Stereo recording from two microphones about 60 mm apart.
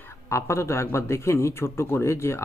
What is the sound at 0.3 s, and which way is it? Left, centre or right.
Speech, left.